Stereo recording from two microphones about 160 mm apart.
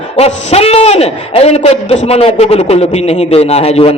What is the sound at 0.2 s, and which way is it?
A man's voice, 40° left (ahead or behind).